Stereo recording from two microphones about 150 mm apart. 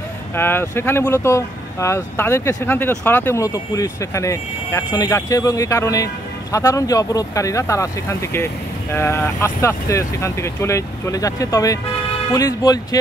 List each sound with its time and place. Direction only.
0.4 s speech: 15° left (ahead or behind)